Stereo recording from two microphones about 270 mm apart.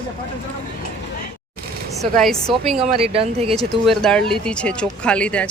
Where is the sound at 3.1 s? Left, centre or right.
Right.